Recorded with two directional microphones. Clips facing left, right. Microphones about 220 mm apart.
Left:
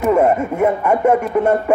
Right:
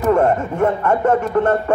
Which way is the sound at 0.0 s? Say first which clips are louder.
Left 1 dB; 10° left (ahead or behind).